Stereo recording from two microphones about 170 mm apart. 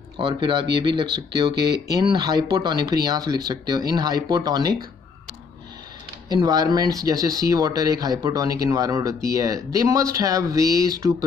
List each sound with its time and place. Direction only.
0.2 s speech: 30° right (ahead or behind)
6.2 s speech: 25° right (ahead or behind)